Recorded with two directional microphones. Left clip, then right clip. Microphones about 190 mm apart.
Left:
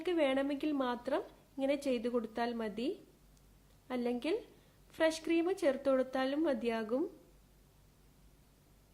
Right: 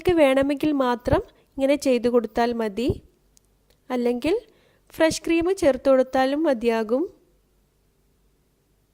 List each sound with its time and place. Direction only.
0.0 s a woman's voice: 50° right (ahead or behind)